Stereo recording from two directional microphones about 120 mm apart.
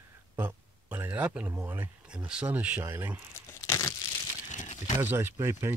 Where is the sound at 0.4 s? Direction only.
15° right (ahead or behind).